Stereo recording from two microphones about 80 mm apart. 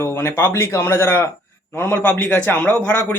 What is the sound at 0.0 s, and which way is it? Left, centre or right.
A man's voice, left.